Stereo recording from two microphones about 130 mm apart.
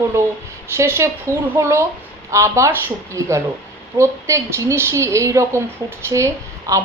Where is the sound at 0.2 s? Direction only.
20° right (ahead or behind).